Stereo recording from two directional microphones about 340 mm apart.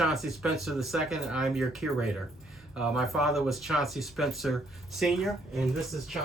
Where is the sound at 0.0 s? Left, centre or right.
Centre.